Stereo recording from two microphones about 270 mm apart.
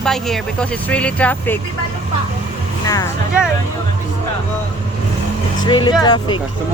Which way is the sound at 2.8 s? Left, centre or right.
Centre.